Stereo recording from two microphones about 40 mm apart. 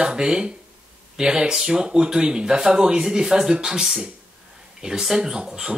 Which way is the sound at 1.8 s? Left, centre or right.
Right.